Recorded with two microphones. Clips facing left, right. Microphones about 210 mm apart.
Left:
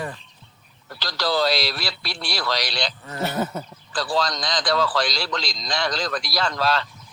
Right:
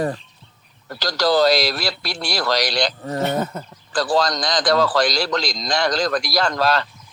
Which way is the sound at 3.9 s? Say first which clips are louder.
Right 5 dB; 45° right (ahead or behind).